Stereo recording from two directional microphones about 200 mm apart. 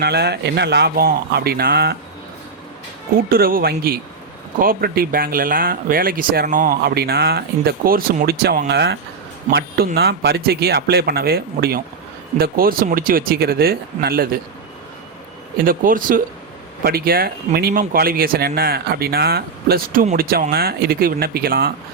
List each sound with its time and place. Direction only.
0.0 s speech: 55° right (ahead or behind)
3.2 s speech: 45° right (ahead or behind)
15.5 s speech: 45° right (ahead or behind)